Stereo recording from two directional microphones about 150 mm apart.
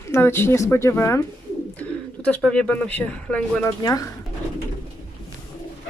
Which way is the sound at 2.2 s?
10° left (ahead or behind).